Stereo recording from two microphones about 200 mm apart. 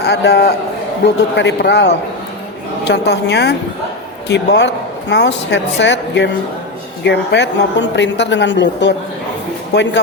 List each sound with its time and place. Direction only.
0.0 s speech: 55° left (ahead or behind)